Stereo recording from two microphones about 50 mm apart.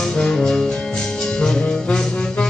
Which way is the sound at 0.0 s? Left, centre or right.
Centre.